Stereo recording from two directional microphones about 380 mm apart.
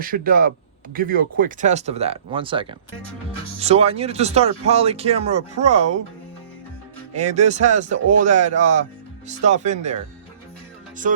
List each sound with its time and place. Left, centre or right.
0.0 s speech: right
7.1 s speech: centre